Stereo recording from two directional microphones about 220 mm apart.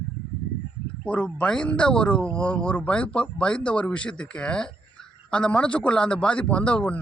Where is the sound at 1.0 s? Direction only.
5° left (ahead or behind).